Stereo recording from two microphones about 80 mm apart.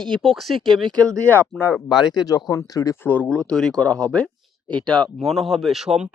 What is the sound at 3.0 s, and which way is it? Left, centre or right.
Speech, left.